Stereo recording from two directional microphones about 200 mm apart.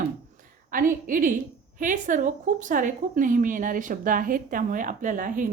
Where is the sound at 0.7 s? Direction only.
45° right (ahead or behind).